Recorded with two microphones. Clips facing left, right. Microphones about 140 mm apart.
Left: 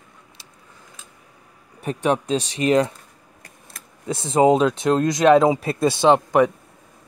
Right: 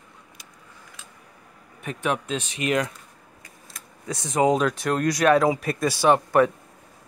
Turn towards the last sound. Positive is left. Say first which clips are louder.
# left 3 dB
turn(degrees=20)  # may be behind; listen again after turning